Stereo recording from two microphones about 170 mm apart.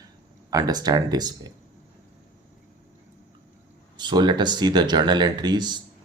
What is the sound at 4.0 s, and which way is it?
Speech, 25° right (ahead or behind).